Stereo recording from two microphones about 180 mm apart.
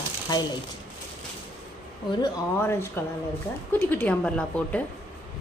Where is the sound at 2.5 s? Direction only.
15° left (ahead or behind).